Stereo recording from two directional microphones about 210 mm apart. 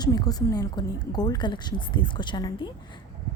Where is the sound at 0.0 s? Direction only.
20° left (ahead or behind).